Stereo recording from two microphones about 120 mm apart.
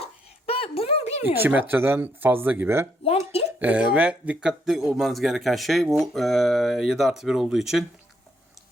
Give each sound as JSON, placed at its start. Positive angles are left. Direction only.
{"t": 0.0, "sound": "a sound", "side_deg": 55}
{"t": 1.2, "sound": "speech", "side_deg": -15}
{"t": 3.0, "sound": "speech", "side_deg": 55}
{"t": 3.6, "sound": "speech", "side_deg": -10}